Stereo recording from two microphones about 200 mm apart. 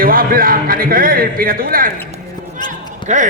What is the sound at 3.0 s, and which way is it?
Speech, 40° right (ahead or behind).